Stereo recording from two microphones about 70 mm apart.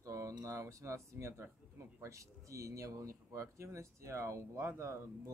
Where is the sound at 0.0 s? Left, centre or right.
Right.